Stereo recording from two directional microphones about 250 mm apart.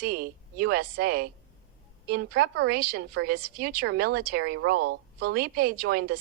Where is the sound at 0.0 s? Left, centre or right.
Right.